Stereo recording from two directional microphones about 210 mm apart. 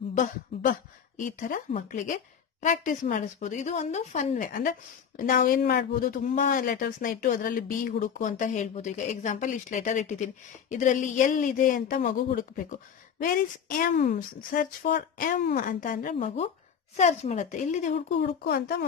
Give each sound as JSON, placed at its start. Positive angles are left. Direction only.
{"t": 0.1, "sound": "a sound", "side_deg": 40}
{"t": 1.2, "sound": "a woman's voice", "side_deg": 40}
{"t": 18.2, "sound": "speech", "side_deg": 50}